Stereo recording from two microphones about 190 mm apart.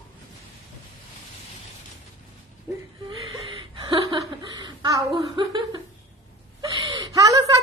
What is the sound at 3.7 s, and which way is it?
Chuckle, 25° right (ahead or behind).